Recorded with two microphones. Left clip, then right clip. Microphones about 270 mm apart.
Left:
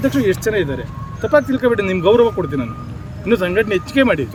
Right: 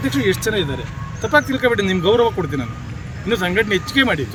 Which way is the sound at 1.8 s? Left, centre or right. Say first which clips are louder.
Left 5 dB; centre.